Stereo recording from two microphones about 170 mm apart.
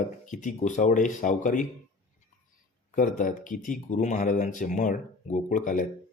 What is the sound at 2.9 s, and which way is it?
Speech, 50° left (ahead or behind).